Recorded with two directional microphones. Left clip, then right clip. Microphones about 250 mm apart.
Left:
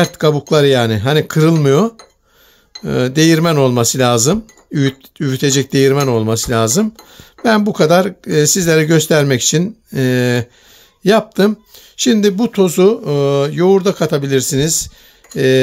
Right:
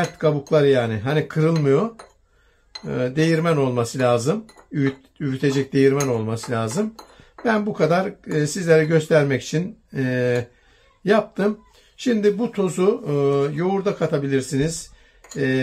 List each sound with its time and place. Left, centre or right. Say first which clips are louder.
0.0 s speech: left 7 dB; left